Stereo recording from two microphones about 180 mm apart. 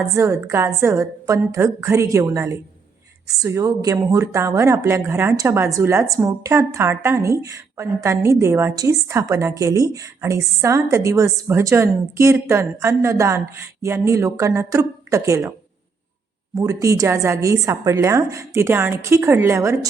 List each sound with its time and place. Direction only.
0.2 s speech: 15° right (ahead or behind)
16.6 s speech: 20° right (ahead or behind)